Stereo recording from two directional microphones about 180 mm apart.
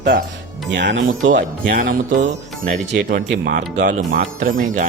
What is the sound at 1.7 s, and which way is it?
Speech, 50° right (ahead or behind).